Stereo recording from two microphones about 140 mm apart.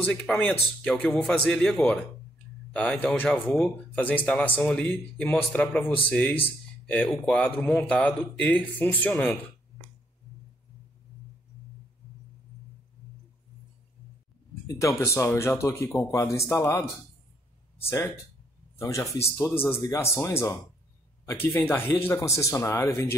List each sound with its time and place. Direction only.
0.3 s speech: centre (ahead or behind)
14.7 s speech: 20° left (ahead or behind)
17.8 s speech: 20° left (ahead or behind)